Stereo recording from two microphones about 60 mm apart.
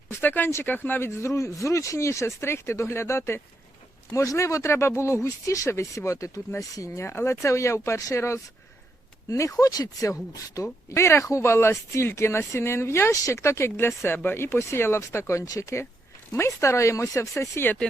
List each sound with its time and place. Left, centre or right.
0.1 s speech: left
4.1 s speech: left
9.6 s speech: left
10.3 s speech: left
15.4 s speech: left
16.6 s speech: left